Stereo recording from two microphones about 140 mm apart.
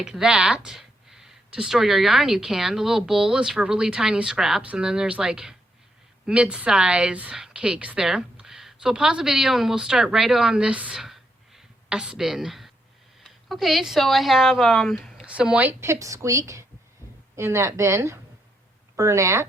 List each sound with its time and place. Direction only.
0.0 s a woman's voice: 5° right (ahead or behind)
15.3 s a woman's voice: 10° right (ahead or behind)